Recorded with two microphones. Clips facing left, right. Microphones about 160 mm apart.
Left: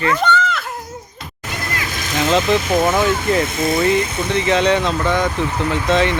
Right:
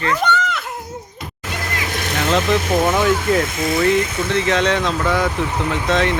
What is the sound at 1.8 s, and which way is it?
Vehicle, 65° right (ahead or behind).